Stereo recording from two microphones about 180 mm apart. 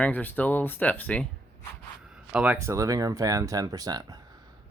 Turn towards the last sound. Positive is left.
turn(degrees=-20)  # may be behind; listen again after turning